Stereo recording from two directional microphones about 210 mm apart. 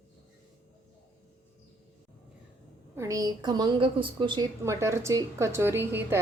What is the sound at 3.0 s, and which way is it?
A woman's voice, 15° right (ahead or behind).